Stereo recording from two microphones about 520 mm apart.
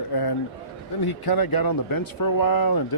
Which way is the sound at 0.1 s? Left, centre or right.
Left.